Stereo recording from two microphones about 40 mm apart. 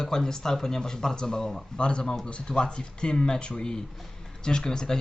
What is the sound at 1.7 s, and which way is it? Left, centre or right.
Speech, left.